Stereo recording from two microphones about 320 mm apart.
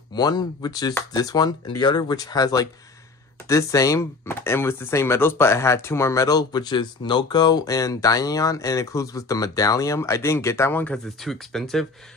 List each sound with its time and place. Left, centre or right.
0.1 s speech: centre